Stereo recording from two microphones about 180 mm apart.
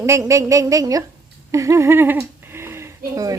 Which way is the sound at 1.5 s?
15° right (ahead or behind).